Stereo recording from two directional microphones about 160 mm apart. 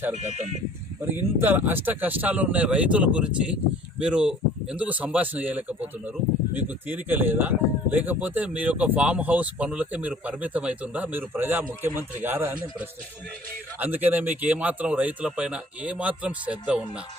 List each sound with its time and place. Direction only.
0.2 s speech: 45° right (ahead or behind)
1.1 s speech: 10° right (ahead or behind)
13.7 s speech: 10° right (ahead or behind)